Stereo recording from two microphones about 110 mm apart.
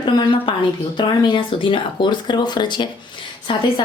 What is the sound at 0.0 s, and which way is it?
Speech, 50° left (ahead or behind).